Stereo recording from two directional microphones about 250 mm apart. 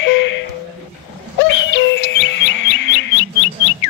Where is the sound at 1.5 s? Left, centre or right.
Left.